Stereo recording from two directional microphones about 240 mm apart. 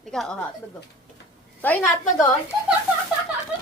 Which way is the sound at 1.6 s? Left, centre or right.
Centre.